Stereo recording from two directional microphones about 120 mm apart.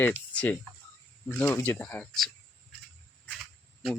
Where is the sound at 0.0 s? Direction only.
15° left (ahead or behind).